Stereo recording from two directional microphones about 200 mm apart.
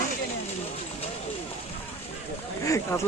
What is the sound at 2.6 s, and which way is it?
Speech, 15° left (ahead or behind).